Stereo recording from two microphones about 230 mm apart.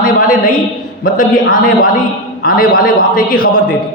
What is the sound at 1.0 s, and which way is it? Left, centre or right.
A man's voice, left.